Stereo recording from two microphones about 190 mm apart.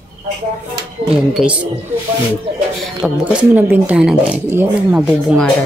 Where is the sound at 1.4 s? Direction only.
5° right (ahead or behind).